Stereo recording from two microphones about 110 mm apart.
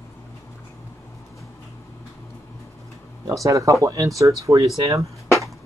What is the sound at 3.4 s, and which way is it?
Speech, 30° right (ahead or behind).